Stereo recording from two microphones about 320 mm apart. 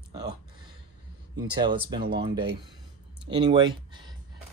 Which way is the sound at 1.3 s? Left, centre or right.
Centre.